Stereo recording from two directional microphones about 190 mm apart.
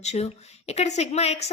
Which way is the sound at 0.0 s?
35° left (ahead or behind).